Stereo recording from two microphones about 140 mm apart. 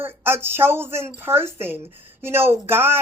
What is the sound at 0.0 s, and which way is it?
Speech, 15° right (ahead or behind).